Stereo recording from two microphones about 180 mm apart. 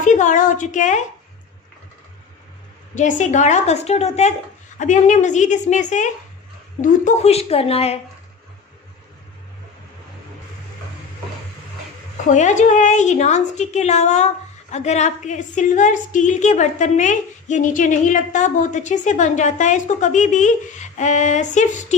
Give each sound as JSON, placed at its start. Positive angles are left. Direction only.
{"t": 0.0, "sound": "a woman's voice", "side_deg": 45}
{"t": 2.9, "sound": "a woman's voice", "side_deg": 45}
{"t": 12.3, "sound": "a woman's voice", "side_deg": 40}